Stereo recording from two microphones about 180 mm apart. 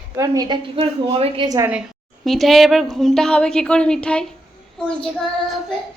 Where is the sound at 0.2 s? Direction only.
25° right (ahead or behind).